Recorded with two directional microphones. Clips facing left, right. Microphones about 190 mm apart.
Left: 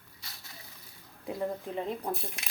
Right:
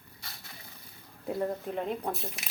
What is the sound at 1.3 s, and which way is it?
Speech, centre (ahead or behind).